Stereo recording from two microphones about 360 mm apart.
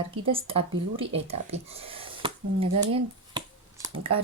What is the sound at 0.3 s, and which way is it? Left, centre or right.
Speech, centre.